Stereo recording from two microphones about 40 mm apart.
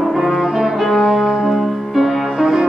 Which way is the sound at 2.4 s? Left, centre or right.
Centre.